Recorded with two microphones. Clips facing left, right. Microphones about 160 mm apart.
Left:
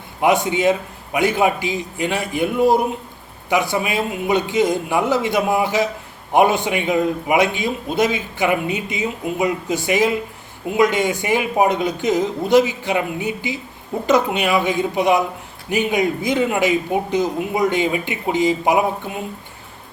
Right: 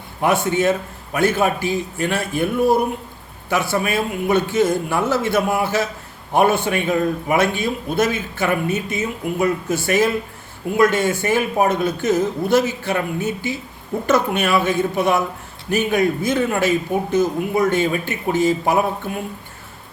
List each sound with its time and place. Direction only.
0.2 s a man's voice: 15° left (ahead or behind)